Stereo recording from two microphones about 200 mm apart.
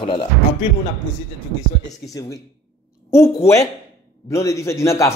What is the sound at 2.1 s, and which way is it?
Speech, 15° left (ahead or behind).